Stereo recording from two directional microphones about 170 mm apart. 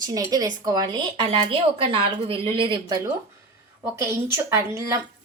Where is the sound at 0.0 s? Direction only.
20° right (ahead or behind).